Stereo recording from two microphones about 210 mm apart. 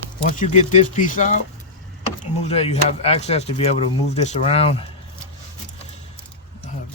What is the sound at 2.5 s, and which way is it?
Speech, 30° left (ahead or behind).